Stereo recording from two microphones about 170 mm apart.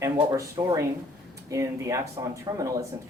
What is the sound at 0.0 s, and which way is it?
Speech, 20° right (ahead or behind).